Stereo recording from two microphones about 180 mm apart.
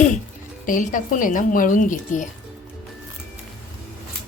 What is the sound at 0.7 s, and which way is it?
A woman's voice, 45° left (ahead or behind).